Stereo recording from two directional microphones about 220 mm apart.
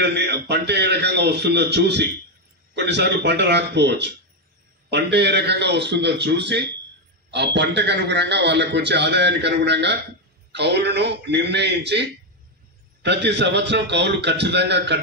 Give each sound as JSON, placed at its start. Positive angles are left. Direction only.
{"t": 0.0, "sound": "a man's voice", "side_deg": -50}